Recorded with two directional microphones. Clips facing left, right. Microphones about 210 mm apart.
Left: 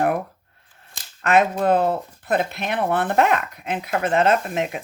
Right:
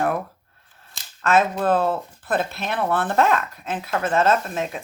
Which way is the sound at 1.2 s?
15° left (ahead or behind).